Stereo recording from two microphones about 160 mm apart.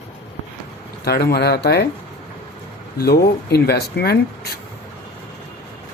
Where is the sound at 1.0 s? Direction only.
75° left (ahead or behind).